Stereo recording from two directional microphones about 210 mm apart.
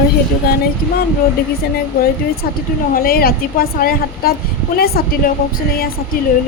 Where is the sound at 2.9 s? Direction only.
45° left (ahead or behind).